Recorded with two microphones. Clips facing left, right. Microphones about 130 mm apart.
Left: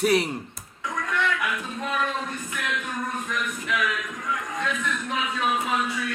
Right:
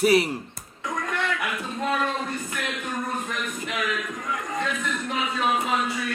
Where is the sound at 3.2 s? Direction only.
35° right (ahead or behind).